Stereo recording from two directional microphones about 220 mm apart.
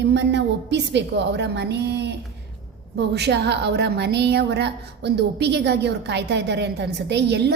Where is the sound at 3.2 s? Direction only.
50° right (ahead or behind).